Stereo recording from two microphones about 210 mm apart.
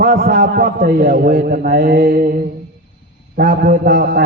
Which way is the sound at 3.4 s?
45° right (ahead or behind).